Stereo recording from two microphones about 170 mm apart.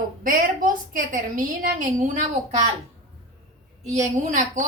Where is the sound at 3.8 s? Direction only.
45° right (ahead or behind).